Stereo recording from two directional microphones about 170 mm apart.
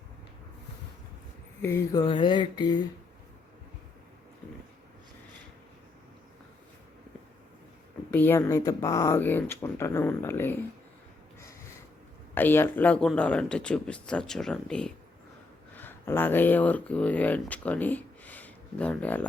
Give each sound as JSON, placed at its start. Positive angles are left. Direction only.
{"t": 1.6, "sound": "a sound", "side_deg": 20}
{"t": 8.1, "sound": "speech", "side_deg": 10}
{"t": 12.3, "sound": "speech", "side_deg": 10}